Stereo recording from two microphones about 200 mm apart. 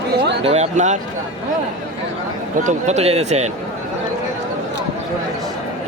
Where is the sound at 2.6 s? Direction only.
35° right (ahead or behind).